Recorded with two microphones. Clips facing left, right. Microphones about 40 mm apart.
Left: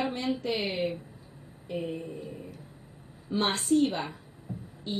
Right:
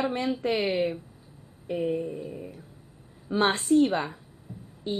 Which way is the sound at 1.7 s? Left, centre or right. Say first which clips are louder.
Right 6 dB; centre.